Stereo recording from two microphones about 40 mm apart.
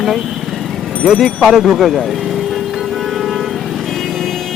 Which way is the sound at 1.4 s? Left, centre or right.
Centre.